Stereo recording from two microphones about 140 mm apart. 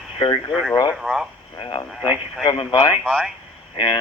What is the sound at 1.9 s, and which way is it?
Speech, 5° right (ahead or behind).